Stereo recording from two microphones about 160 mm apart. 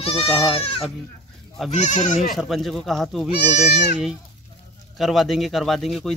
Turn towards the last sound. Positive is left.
turn(degrees=0)  # may be behind; listen again after turning